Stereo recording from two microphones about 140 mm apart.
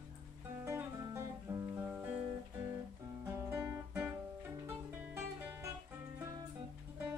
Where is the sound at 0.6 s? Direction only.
20° right (ahead or behind).